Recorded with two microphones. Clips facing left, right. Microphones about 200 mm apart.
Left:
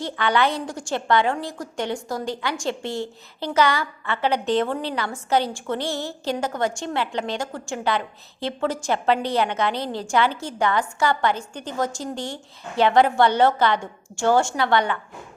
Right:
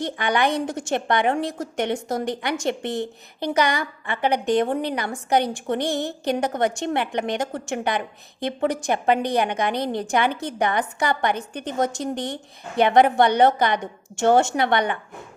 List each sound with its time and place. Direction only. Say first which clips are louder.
0.0 s a woman's voice: even; 15° right (ahead or behind)